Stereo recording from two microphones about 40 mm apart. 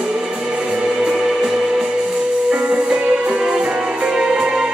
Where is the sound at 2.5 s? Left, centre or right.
Right.